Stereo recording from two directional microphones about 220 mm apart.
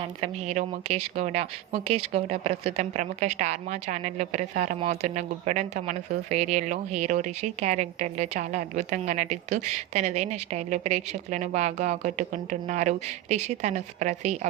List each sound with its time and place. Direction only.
0.0 s speech: 30° right (ahead or behind)